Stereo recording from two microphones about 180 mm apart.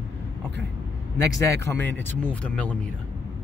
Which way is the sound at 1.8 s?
10° left (ahead or behind).